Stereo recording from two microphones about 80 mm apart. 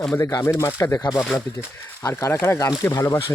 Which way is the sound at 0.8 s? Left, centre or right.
Left.